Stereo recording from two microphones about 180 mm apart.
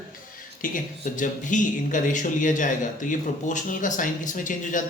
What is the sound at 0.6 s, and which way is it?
Speech, 45° left (ahead or behind).